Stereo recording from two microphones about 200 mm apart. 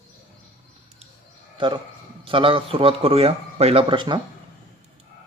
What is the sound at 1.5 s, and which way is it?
A man's voice, 25° right (ahead or behind).